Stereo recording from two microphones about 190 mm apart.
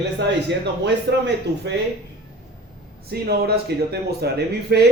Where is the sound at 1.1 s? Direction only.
65° right (ahead or behind).